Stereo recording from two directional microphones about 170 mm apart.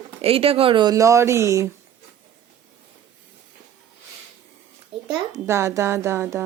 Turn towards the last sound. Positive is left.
turn(degrees=-15)  # may be behind; listen again after turning